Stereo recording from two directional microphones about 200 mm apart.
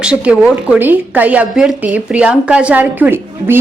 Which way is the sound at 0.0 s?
5° right (ahead or behind).